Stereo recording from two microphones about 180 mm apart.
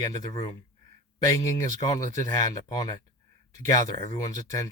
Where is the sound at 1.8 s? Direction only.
20° left (ahead or behind).